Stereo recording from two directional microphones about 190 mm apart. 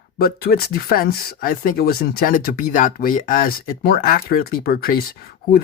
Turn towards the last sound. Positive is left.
turn(degrees=55)  # may be behind; listen again after turning